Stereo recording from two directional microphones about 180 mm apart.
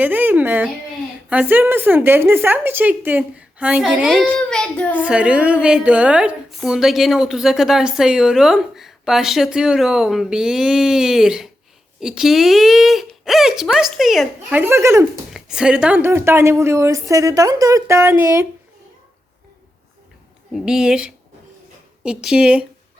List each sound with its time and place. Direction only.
0.0 s a sound: 10° right (ahead or behind)
1.3 s a woman's voice: 10° right (ahead or behind)
4.9 s a woman's voice: 5° right (ahead or behind)
14.6 s a woman's voice: 15° right (ahead or behind)
15.3 s a woman's voice: 5° right (ahead or behind)
20.5 s a woman's voice: 5° right (ahead or behind)